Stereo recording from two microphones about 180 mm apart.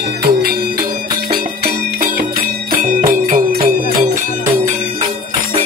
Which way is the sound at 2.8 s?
50° right (ahead or behind).